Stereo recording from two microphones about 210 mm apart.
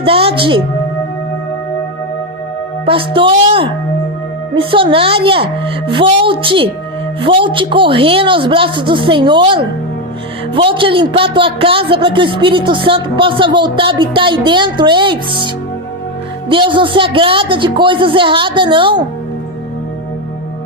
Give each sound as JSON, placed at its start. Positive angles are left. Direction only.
{"t": 0.0, "sound": "a woman's voice", "side_deg": -25}
{"t": 2.8, "sound": "a man's voice", "side_deg": -25}
{"t": 16.5, "sound": "a man's voice", "side_deg": -25}